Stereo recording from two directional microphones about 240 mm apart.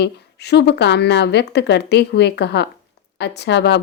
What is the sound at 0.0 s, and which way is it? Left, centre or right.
A woman's voice, left.